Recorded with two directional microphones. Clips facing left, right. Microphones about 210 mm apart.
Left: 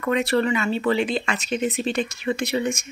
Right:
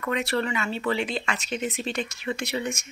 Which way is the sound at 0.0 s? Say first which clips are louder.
Left 6 dB; 40° left (ahead or behind).